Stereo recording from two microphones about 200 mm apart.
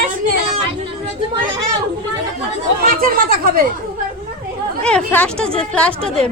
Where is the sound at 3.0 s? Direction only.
45° right (ahead or behind).